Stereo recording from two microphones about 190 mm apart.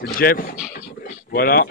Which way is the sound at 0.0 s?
50° left (ahead or behind).